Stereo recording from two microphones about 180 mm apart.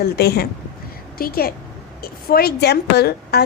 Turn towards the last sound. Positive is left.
turn(degrees=65)  # may be behind; listen again after turning